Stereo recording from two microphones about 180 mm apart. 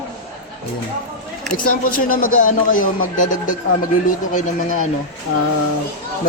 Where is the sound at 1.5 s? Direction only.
50° left (ahead or behind).